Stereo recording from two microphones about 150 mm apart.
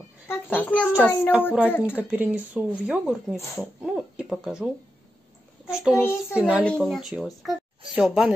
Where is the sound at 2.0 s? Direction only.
10° right (ahead or behind).